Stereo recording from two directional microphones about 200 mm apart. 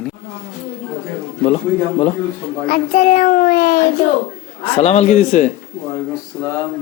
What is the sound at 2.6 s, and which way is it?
A child's voice, 40° left (ahead or behind).